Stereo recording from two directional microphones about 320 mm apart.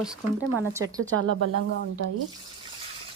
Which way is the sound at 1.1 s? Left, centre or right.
Right.